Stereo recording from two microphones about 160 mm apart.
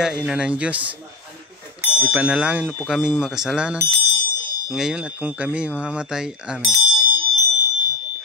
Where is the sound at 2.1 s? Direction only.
5° right (ahead or behind).